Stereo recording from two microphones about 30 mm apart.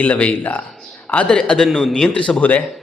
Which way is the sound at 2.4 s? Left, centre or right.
Left.